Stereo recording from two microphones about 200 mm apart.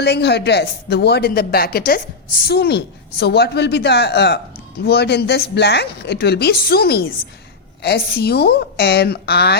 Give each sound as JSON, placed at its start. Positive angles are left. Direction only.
{"t": 0.0, "sound": "speech", "side_deg": 55}